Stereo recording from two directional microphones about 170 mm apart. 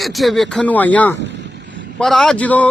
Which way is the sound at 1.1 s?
90° right.